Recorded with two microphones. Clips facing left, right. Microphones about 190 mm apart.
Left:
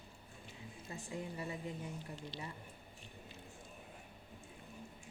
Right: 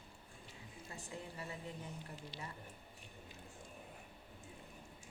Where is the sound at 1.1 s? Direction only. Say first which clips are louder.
Left 5 dB; 15° left (ahead or behind).